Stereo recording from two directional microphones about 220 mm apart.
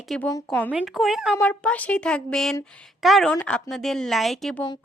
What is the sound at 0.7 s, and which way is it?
A woman's voice, 5° right (ahead or behind).